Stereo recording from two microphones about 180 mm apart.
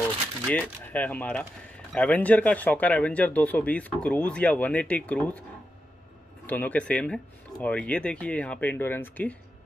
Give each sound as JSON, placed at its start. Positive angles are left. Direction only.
{"t": 0.5, "sound": "speech", "side_deg": 10}
{"t": 6.4, "sound": "speech", "side_deg": 10}